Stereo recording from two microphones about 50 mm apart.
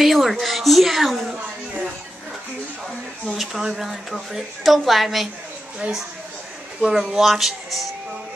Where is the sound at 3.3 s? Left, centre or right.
Centre.